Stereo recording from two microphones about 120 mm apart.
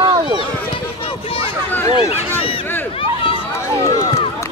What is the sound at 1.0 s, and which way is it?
Speech, 50° left (ahead or behind).